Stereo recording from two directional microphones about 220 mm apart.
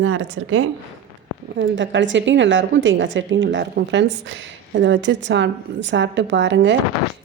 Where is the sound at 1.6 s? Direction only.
55° right (ahead or behind).